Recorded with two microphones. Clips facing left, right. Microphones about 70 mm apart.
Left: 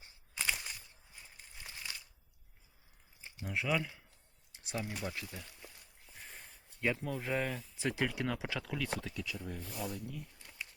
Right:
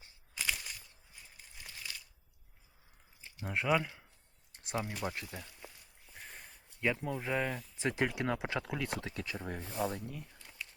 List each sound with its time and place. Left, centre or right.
0.3 s a sound: centre
3.4 s speech: right
4.5 s a sound: right
5.0 s speech: right
6.1 s a sound: centre
6.9 s speech: right
7.2 s speech: centre
7.8 s speech: right
9.0 s speech: right